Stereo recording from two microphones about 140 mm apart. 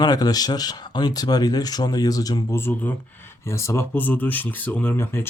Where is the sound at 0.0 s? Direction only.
25° left (ahead or behind).